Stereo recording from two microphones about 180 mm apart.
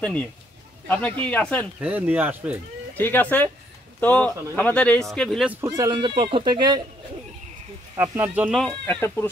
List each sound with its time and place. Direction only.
0.0 s speech: 5° left (ahead or behind)
1.8 s speech: 10° right (ahead or behind)
3.0 s speech: 10° left (ahead or behind)
5.5 s speech: 15° right (ahead or behind)
7.9 s speech: 10° right (ahead or behind)
8.5 s speech: 5° left (ahead or behind)